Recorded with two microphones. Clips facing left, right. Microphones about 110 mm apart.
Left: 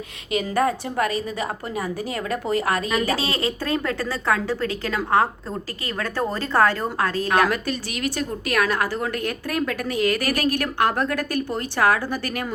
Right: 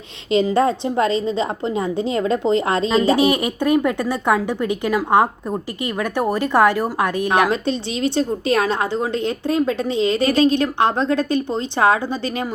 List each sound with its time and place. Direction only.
0.3 s a woman's voice: 25° right (ahead or behind)